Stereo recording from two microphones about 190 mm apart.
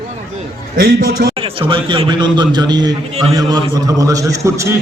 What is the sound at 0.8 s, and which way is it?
Speech, 55° right (ahead or behind).